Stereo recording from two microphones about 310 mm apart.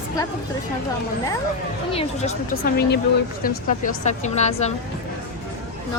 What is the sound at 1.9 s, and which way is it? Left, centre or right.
A woman's voice, centre.